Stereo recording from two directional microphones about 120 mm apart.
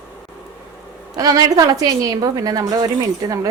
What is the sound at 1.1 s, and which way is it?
A woman's voice, 30° right (ahead or behind).